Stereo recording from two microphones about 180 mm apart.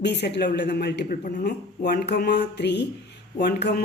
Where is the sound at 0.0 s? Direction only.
70° left (ahead or behind).